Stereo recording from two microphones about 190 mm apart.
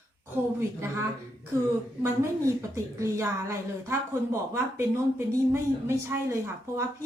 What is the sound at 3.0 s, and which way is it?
A woman's voice, 15° right (ahead or behind).